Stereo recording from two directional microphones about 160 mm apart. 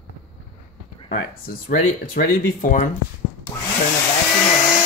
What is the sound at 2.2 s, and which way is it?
Speech, 60° left (ahead or behind).